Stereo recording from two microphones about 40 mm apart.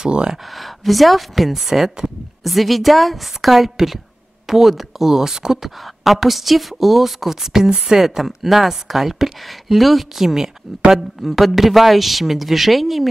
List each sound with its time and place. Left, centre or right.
0.0 s speech: centre
0.5 s speech: centre